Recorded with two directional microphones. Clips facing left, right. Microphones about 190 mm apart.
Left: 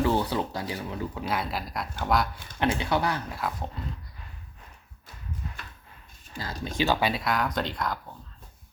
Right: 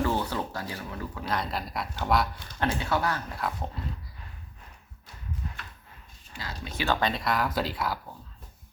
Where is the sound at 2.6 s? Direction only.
15° left (ahead or behind).